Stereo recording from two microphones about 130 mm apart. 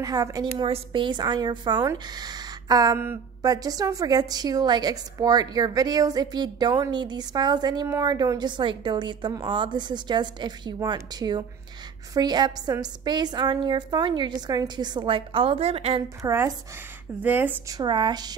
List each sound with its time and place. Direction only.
0.0 s a woman's voice: 25° right (ahead or behind)
0.6 s a woman's voice: 40° right (ahead or behind)
16.2 s a woman's voice: 25° right (ahead or behind)
17.2 s speech: 15° right (ahead or behind)
17.6 s a woman's voice: 30° right (ahead or behind)